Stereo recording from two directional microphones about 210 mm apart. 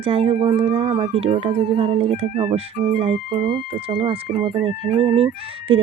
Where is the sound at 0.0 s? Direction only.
25° right (ahead or behind).